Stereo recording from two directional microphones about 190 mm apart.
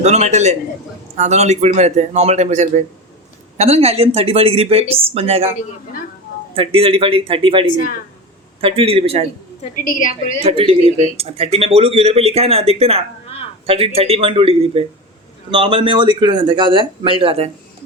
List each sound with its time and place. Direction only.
0.0 s speech: 35° right (ahead or behind)
6.6 s a man's voice: 30° right (ahead or behind)
9.7 s a woman's voice: 45° left (ahead or behind)
10.4 s speech: 30° right (ahead or behind)
10.8 s speech: 35° left (ahead or behind)
11.2 s a man's voice: 30° right (ahead or behind)